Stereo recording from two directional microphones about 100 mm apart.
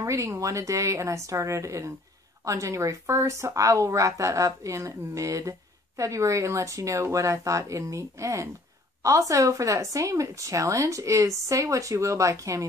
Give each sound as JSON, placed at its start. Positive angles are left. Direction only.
{"t": 0.0, "sound": "speech", "side_deg": -30}